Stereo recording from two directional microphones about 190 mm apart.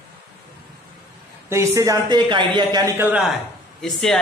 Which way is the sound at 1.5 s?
15° right (ahead or behind).